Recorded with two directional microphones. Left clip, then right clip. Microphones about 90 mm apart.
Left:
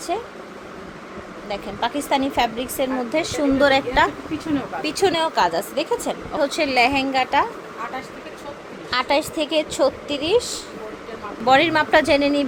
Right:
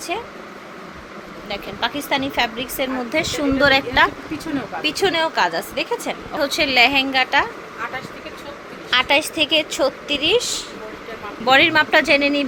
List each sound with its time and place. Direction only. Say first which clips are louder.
0.1 s a woman's voice: even; 5° left (ahead or behind)
1.5 s a woman's voice: right 1 dB; 25° left (ahead or behind)
2.7 s a woman's voice: right 1 dB; 5° left (ahead or behind); by 6.4 s 30° left (ahead or behind)
6.4 s a woman's voice: right 3 dB; 10° left (ahead or behind)
8.9 s a woman's voice: right 3 dB; 5° right (ahead or behind)
11.4 s a woman's voice: right 2 dB; 15° left (ahead or behind)